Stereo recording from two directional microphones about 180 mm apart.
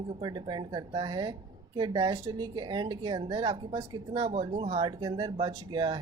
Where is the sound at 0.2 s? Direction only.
25° right (ahead or behind).